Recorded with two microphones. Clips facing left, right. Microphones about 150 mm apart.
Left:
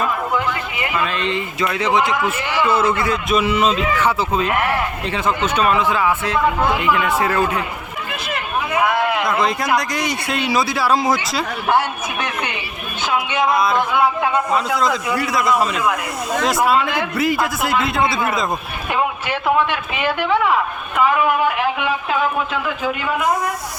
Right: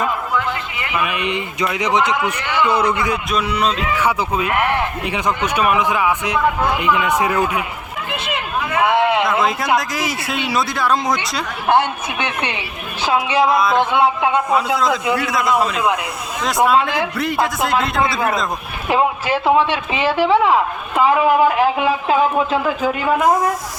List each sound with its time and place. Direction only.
0.3 s a sound: 20° left (ahead or behind)
0.9 s a man's voice: 15° right (ahead or behind)
3.2 s speech: centre (ahead or behind)
4.0 s a man's voice: 10° right (ahead or behind)
8.1 s hubbub: 25° right (ahead or behind)
8.8 s a sound: 25° right (ahead or behind)
9.2 s speech: centre (ahead or behind)
12.2 s a woman's voice: 30° right (ahead or behind)
15.1 s speech: centre (ahead or behind)
17.2 s speech: centre (ahead or behind)
18.9 s a man's voice: 30° right (ahead or behind)